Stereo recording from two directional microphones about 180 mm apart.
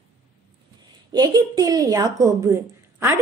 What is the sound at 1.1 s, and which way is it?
A woman's voice, 20° right (ahead or behind).